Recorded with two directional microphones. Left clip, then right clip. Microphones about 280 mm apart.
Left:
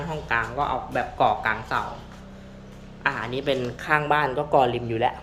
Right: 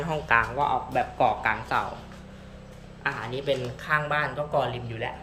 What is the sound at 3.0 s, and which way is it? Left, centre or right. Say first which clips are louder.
Speech: left 4 dB; centre.